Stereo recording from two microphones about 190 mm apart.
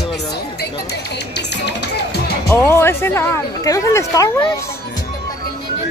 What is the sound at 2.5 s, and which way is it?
Music, 10° left (ahead or behind).